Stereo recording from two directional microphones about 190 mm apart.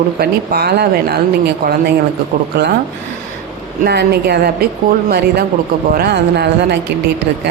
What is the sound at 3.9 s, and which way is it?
Speech, 60° right (ahead or behind).